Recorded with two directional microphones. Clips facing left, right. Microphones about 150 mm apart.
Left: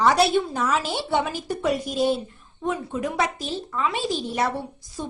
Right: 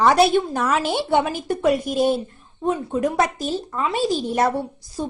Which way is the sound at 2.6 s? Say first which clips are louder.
Right 5 dB; 35° right (ahead or behind).